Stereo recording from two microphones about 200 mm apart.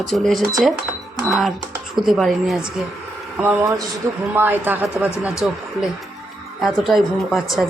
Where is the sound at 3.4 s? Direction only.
15° right (ahead or behind).